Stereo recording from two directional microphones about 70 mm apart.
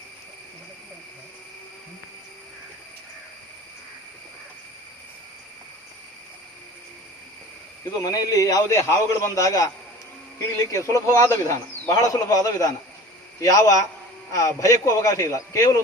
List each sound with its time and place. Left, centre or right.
8.0 s a man's voice: left
10.7 s a man's voice: left